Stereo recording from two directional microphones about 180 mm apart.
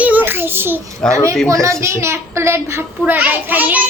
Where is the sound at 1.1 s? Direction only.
15° right (ahead or behind).